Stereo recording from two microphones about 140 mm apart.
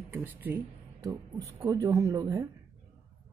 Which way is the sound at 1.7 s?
25° right (ahead or behind).